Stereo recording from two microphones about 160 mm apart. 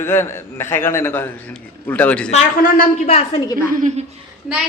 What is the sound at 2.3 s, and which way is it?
Speech, 60° left (ahead or behind).